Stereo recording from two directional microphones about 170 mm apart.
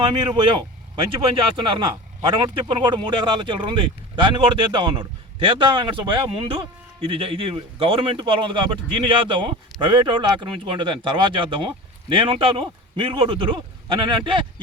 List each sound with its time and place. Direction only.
0.0 s a man's voice: 25° right (ahead or behind)